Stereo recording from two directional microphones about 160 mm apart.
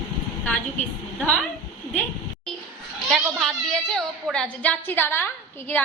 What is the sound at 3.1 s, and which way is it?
A woman's voice, 5° left (ahead or behind).